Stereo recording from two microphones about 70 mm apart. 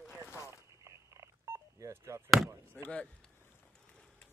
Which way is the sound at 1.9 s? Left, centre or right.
Right.